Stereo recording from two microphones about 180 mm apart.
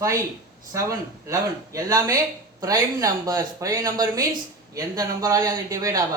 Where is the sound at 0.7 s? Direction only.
15° right (ahead or behind).